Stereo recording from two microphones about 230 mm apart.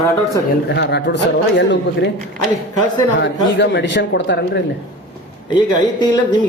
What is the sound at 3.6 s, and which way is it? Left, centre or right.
Speech, left.